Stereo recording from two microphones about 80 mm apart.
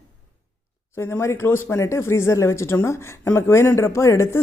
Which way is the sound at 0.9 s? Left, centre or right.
Left.